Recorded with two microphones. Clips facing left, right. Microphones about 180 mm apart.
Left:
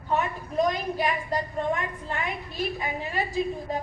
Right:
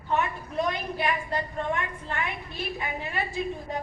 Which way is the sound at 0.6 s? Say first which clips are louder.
Left 3 dB; 40° left (ahead or behind).